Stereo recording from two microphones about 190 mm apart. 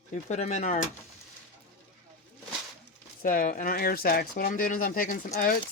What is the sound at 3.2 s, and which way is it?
Speech, 45° left (ahead or behind).